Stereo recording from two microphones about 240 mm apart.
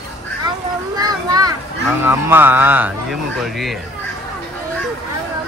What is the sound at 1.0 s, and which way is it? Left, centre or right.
Children playing, centre.